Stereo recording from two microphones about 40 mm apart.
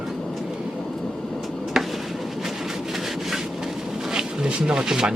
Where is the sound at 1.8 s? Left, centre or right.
Centre.